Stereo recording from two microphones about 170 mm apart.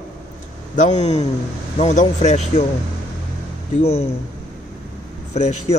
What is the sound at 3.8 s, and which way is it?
Speech, 40° left (ahead or behind).